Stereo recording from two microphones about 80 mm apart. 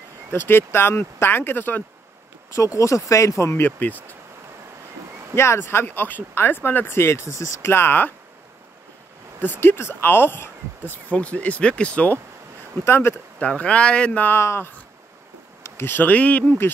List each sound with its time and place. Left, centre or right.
0.3 s speech: left
2.5 s speech: left
3.6 s speech: left
5.3 s speech: left
9.4 s speech: left
12.8 s speech: left
13.4 s speech: centre
14.4 s speech: left; by 16.5 s centre